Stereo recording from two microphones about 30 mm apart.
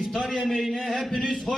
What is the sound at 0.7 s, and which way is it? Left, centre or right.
Speech, left.